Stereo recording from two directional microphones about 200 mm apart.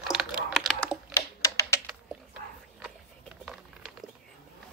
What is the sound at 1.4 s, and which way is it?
Typing, 15° left (ahead or behind).